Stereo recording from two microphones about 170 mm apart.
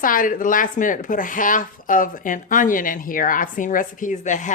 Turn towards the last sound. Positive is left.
turn(degrees=45)  # may be behind; listen again after turning